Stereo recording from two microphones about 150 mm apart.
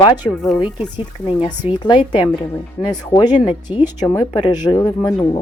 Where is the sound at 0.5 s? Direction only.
35° left (ahead or behind).